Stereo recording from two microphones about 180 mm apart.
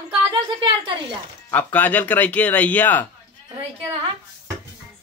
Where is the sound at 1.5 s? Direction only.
10° left (ahead or behind).